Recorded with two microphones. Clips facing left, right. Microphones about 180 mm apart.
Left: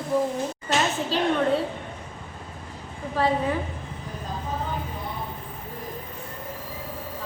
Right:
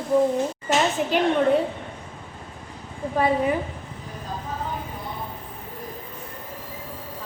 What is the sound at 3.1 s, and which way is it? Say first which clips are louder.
Speech: right 2 dB; 15° right (ahead or behind).